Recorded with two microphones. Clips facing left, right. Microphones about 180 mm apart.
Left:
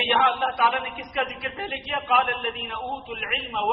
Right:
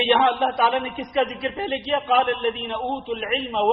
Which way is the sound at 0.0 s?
30° right (ahead or behind).